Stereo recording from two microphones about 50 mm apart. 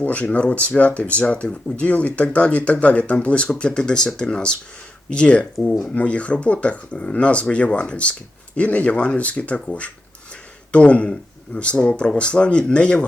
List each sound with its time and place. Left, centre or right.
0.0 s speech: left
5.5 s speech: centre
5.9 s speech: left
10.7 s speech: left